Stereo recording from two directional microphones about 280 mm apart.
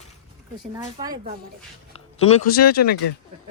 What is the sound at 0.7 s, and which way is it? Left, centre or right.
Speech, centre.